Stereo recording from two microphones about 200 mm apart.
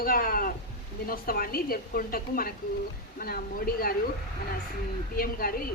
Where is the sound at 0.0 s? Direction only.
45° left (ahead or behind).